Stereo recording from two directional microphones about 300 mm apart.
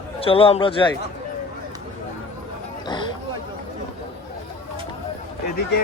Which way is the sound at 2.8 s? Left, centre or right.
Centre.